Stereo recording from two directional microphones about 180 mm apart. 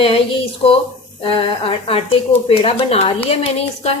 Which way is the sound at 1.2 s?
30° left (ahead or behind).